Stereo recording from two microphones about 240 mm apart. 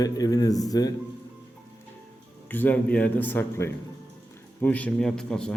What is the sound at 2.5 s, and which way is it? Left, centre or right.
A man's voice, centre.